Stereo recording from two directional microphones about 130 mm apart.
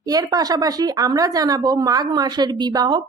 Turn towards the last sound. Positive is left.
turn(degrees=-35)  # may be behind; listen again after turning